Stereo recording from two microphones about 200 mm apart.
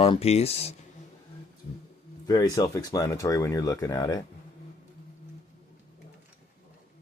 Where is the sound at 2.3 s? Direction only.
20° left (ahead or behind).